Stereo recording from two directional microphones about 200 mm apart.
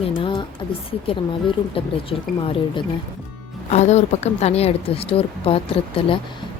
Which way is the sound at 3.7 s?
35° left (ahead or behind).